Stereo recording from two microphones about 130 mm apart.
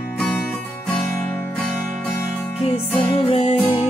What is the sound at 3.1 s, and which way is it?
Music, 50° left (ahead or behind).